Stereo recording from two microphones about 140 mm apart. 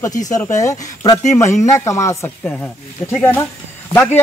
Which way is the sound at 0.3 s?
25° left (ahead or behind).